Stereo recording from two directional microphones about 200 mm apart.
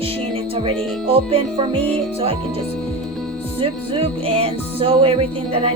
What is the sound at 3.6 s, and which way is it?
Music, 30° right (ahead or behind).